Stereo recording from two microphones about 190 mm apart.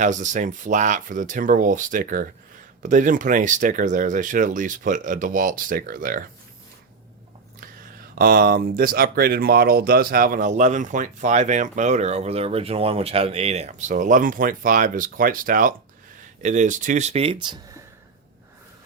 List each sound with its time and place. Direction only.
0.0 s speech: 40° right (ahead or behind)
8.2 s speech: 50° right (ahead or behind); by 17.6 s 25° right (ahead or behind)